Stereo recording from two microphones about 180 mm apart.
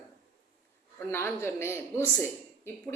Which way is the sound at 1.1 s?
15° left (ahead or behind).